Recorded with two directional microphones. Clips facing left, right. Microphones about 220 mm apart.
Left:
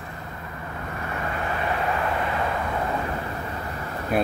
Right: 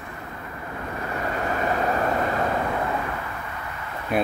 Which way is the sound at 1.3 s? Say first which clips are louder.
Right 3 dB; 40° right (ahead or behind).